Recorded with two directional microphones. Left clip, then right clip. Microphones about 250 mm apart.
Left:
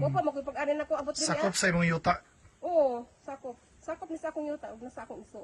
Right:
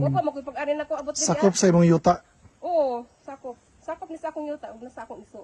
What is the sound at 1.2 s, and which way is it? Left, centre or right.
Speech, centre.